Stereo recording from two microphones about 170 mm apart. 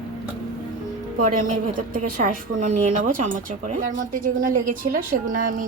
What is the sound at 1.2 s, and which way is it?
A woman's voice, 55° right (ahead or behind).